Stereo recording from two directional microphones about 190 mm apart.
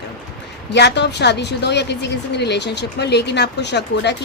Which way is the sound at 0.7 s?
65° left (ahead or behind).